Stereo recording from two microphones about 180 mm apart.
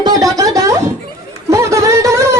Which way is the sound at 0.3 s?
20° right (ahead or behind).